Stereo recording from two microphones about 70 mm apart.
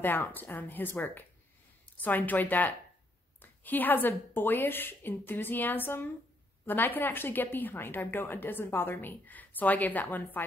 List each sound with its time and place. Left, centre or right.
0.0 s a woman's voice: left